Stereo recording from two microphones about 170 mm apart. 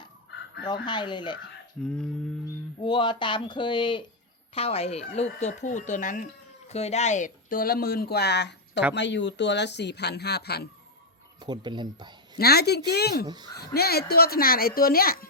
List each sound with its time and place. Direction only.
0.9 s speech: 25° left (ahead or behind)
1.8 s a sound: 5° left (ahead or behind)
2.7 s speech: 25° left (ahead or behind); by 10.7 s 75° left (ahead or behind)
11.3 s speech: 25° right (ahead or behind)
12.4 s a woman's voice: 70° left (ahead or behind)
13.2 s speech: 25° right (ahead or behind)
13.5 s speech: 65° left (ahead or behind)